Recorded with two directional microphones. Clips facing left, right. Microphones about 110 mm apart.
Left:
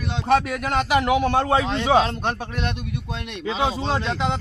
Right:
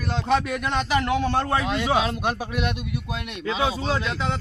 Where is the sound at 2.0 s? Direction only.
10° right (ahead or behind).